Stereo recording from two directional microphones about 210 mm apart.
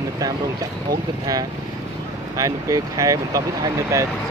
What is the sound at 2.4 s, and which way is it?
Speech, 15° right (ahead or behind).